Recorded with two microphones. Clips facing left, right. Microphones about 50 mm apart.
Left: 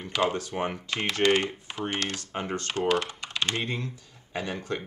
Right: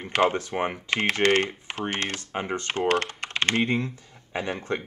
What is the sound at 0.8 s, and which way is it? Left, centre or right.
Speech, right.